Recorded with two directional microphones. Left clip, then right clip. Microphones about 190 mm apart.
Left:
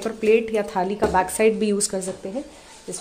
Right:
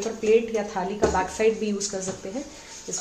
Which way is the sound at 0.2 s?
60° left (ahead or behind).